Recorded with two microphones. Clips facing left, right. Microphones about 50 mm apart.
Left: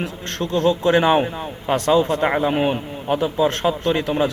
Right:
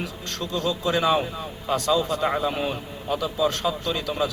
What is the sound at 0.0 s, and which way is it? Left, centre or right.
A man's voice, left.